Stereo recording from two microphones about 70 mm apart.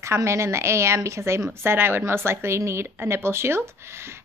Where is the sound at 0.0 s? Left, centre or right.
Right.